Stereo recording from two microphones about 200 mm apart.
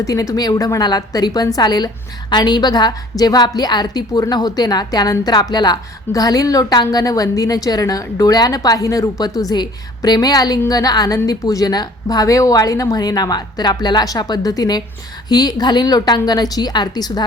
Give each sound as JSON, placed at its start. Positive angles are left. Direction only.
{"t": 0.0, "sound": "a woman's voice", "side_deg": 15}